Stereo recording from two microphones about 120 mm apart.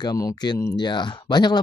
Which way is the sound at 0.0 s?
35° left (ahead or behind).